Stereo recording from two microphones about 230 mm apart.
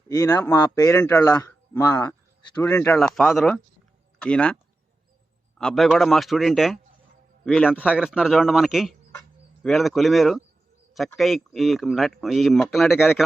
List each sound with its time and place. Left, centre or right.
0.1 s speech: centre
5.5 s speech: centre